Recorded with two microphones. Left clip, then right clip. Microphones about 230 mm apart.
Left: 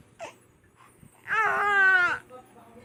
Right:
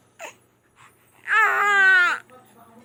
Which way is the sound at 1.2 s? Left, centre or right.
Centre.